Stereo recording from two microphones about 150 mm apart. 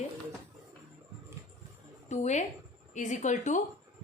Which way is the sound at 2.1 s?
50° left (ahead or behind).